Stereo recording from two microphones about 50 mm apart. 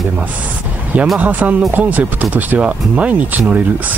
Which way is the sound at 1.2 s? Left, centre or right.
Right.